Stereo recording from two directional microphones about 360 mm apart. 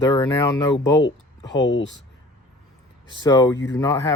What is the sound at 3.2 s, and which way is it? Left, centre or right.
Speech, centre.